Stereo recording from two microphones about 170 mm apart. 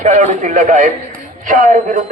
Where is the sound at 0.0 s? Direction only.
45° right (ahead or behind).